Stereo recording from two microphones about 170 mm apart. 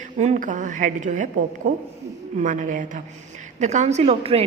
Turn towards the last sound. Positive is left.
turn(degrees=-35)  # may be behind; listen again after turning